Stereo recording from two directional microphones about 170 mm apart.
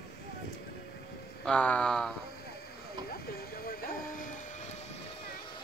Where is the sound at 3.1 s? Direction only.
65° left (ahead or behind); by 4.8 s 45° left (ahead or behind).